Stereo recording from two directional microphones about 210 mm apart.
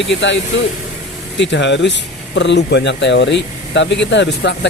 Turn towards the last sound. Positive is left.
turn(degrees=55)  # may be behind; listen again after turning